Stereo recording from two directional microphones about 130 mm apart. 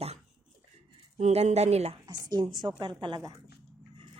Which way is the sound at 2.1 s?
30° right (ahead or behind).